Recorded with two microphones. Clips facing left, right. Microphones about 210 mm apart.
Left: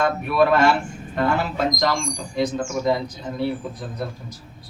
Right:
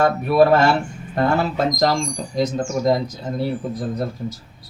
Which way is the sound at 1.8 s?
40° right (ahead or behind).